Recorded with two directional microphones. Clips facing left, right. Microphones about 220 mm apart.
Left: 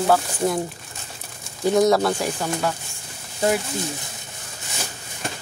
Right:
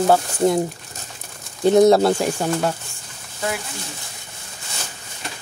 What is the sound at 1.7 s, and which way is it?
Speech, 25° right (ahead or behind).